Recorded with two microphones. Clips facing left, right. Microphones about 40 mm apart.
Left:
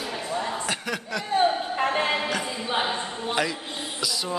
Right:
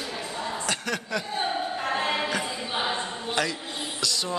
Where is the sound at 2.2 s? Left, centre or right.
Centre.